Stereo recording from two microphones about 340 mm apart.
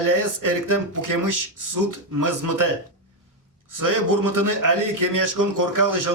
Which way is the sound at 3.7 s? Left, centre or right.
Right.